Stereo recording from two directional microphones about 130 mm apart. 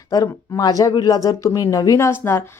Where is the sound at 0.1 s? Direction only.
30° left (ahead or behind).